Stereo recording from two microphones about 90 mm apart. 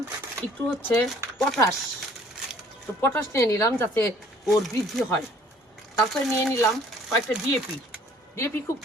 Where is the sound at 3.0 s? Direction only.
25° left (ahead or behind).